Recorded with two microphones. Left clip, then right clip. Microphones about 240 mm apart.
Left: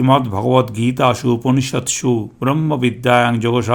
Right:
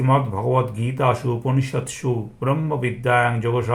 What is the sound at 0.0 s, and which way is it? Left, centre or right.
Speech, left.